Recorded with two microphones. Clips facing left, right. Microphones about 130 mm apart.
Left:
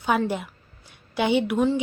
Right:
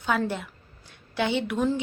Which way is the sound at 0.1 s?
15° left (ahead or behind).